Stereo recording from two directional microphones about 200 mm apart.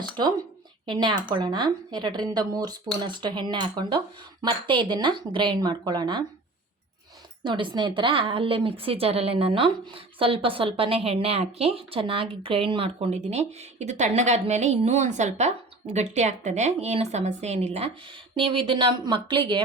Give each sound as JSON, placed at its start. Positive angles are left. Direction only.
{"t": 0.0, "sound": "a woman's voice", "side_deg": -20}
{"t": 7.4, "sound": "a woman's voice", "side_deg": -25}